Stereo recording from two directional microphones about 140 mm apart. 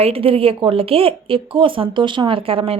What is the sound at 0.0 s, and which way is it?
Speech, 40° right (ahead or behind).